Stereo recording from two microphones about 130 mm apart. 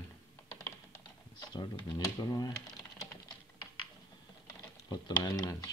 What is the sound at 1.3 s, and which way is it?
Speech, 30° left (ahead or behind).